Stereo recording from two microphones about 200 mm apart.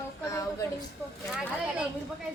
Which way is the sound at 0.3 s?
15° left (ahead or behind).